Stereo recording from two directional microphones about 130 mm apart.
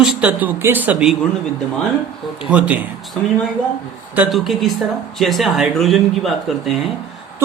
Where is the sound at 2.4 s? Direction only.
10° right (ahead or behind).